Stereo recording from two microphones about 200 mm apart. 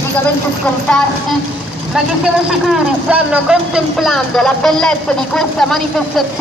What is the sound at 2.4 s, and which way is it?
Speech, 5° right (ahead or behind).